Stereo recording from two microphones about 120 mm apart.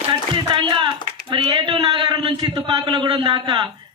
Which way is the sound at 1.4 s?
40° right (ahead or behind).